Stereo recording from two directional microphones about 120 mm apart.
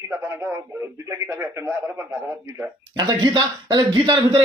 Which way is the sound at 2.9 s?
35° right (ahead or behind).